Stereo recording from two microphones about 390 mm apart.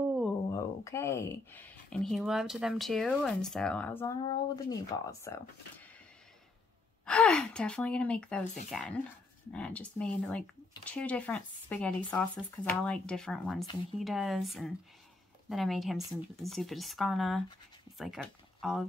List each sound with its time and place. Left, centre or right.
0.1 s speech: centre
7.1 s speech: centre